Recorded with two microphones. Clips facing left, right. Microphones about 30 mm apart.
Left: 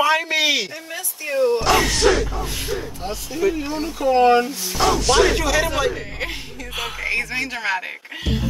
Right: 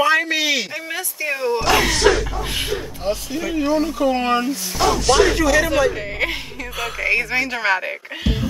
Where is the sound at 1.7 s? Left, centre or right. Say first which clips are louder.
Right 1 dB; centre.